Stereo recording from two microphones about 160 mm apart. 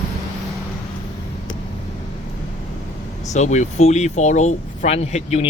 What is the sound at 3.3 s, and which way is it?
Speech, 45° left (ahead or behind).